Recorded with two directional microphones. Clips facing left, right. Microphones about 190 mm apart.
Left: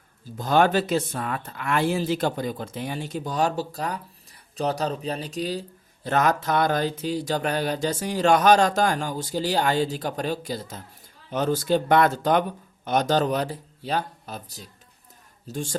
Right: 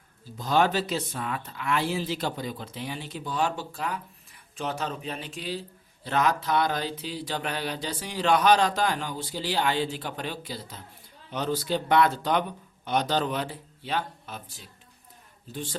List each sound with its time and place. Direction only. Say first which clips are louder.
0.3 s speech: left 4 dB; 50° left (ahead or behind)